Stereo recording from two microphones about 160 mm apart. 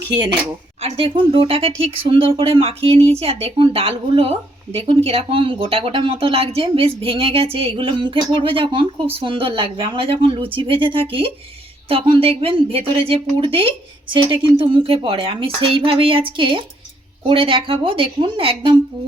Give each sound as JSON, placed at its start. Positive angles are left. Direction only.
{"t": 0.8, "sound": "speech", "side_deg": -40}